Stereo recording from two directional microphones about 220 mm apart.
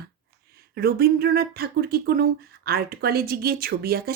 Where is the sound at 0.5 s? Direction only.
45° right (ahead or behind).